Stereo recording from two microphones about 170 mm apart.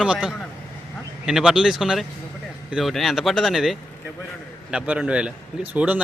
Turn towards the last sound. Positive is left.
turn(degrees=-10)  # may be behind; listen again after turning